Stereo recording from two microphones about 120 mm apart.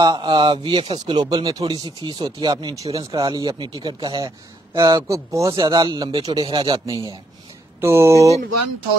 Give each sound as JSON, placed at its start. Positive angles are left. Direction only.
{"t": 0.0, "sound": "a man's voice", "side_deg": -35}
{"t": 7.8, "sound": "speech", "side_deg": -20}